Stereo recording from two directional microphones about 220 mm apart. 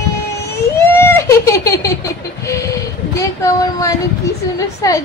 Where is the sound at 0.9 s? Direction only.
10° left (ahead or behind).